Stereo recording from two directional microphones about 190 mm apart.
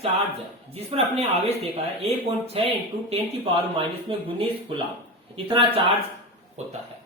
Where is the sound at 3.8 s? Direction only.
25° right (ahead or behind).